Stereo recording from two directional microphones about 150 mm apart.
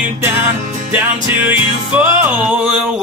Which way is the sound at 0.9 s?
15° right (ahead or behind).